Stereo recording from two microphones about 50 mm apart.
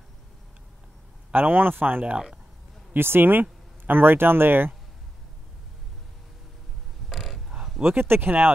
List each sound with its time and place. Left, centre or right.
1.3 s speech: right
2.1 s speech: centre
2.9 s speech: right
7.1 s a sound: centre
7.8 s speech: right